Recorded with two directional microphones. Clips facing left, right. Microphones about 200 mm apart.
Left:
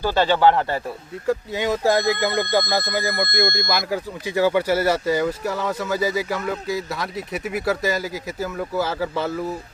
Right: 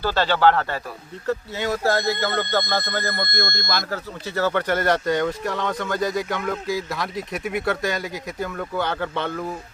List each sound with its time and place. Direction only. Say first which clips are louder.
0.0 s speech: left 2 dB; 15° left (ahead or behind)